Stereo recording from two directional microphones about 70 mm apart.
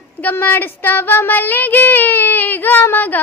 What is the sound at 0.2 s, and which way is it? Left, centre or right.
A woman's voice, left.